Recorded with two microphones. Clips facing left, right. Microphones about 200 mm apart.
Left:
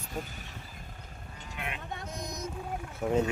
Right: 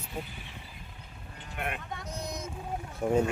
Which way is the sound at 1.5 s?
50° right (ahead or behind).